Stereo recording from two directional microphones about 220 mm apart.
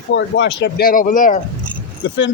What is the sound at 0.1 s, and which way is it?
Speech, 55° left (ahead or behind).